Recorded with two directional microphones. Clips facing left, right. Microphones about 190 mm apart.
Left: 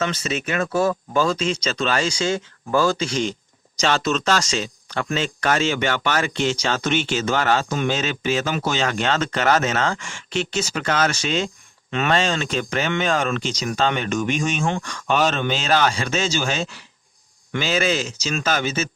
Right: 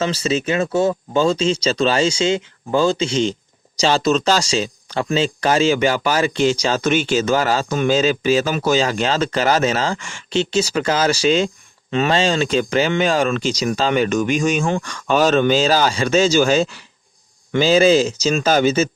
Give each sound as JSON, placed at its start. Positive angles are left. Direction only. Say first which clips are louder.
{"t": 0.0, "sound": "speech", "louder": "right 5 dB", "side_deg": -30}